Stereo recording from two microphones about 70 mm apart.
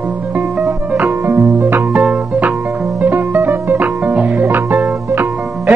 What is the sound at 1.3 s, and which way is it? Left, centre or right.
Music, right.